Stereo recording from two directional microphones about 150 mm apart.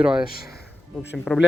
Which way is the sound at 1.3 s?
5° left (ahead or behind).